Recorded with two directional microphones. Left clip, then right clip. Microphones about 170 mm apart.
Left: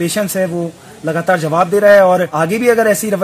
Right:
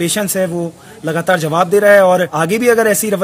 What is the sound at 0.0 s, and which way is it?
A man's voice, 25° right (ahead or behind).